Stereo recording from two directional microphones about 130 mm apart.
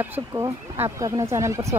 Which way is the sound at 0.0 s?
15° right (ahead or behind).